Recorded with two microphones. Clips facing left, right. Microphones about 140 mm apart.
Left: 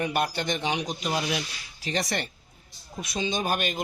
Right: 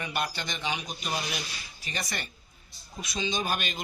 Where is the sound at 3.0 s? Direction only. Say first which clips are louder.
Left 3 dB; 55° left (ahead or behind).